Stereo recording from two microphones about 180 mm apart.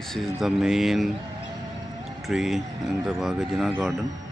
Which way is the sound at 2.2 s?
Centre (ahead or behind).